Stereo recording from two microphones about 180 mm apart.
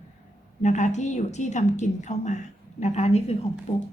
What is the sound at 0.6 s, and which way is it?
A woman's voice, 40° left (ahead or behind).